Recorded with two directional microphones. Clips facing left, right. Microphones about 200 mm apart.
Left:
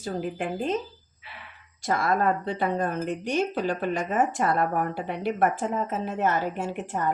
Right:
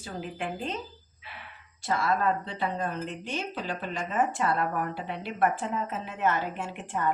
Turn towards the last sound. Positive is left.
turn(degrees=40)  # may be behind; listen again after turning